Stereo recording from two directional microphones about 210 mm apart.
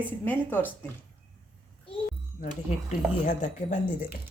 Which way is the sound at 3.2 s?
35° left (ahead or behind).